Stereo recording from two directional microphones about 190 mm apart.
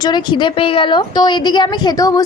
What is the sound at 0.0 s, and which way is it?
A woman's voice, 25° left (ahead or behind).